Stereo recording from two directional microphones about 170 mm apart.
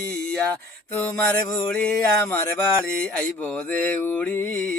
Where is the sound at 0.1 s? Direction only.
10° left (ahead or behind).